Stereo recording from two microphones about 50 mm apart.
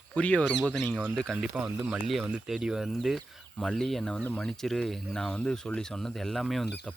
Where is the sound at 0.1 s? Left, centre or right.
Left.